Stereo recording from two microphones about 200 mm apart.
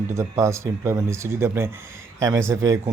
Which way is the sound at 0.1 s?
15° right (ahead or behind).